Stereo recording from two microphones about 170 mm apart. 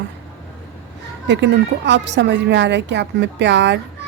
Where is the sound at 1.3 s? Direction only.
90° right.